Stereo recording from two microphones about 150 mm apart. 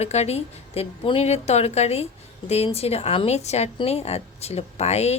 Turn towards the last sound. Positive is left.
turn(degrees=45)  # may be behind; listen again after turning